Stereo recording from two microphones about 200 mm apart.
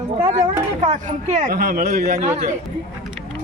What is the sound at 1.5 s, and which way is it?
Speech, 50° right (ahead or behind).